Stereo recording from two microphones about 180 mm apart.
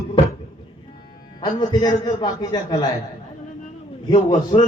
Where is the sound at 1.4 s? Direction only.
25° left (ahead or behind).